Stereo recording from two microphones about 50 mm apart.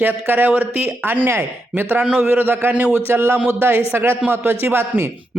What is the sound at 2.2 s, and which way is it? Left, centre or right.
A man's voice, right.